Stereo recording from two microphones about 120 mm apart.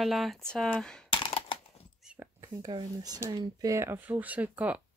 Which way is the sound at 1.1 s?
45° left (ahead or behind).